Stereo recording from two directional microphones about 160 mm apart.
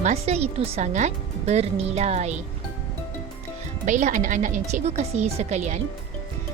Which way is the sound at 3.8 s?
50° right (ahead or behind).